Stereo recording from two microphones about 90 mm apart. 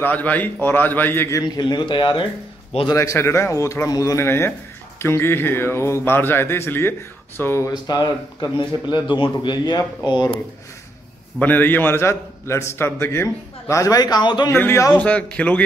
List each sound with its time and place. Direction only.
0.0 s speech: 20° left (ahead or behind)
1.4 s speech: 55° left (ahead or behind)
3.0 s a man's voice: 30° left (ahead or behind)
4.2 s speech: 30° left (ahead or behind)
7.7 s speech: 50° left (ahead or behind)
11.3 s speech: 20° left (ahead or behind); by 13.9 s 35° left (ahead or behind)
13.9 s speech: 50° left (ahead or behind)
14.5 s speech: 30° left (ahead or behind)
15.0 s speech: 15° left (ahead or behind)